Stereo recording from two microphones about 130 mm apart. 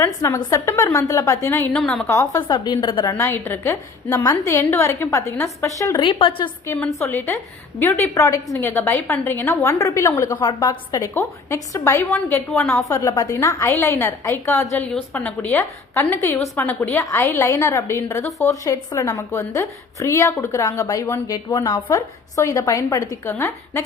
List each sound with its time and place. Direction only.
0.0 s a woman's voice: 25° left (ahead or behind)
1.7 s a woman's voice: 5° left (ahead or behind)
2.0 s a woman's voice: 25° left (ahead or behind)
3.2 s a woman's voice: 20° left (ahead or behind)
6.0 s a woman's voice: 40° left (ahead or behind)
6.7 s a woman's voice: 10° left (ahead or behind); by 11.0 s 30° left (ahead or behind)
11.0 s a woman's voice: 20° left (ahead or behind)
12.1 s a woman's voice: 10° left (ahead or behind)
12.9 s a woman's voice: 25° left (ahead or behind)
21.8 s a woman's voice: 20° left (ahead or behind)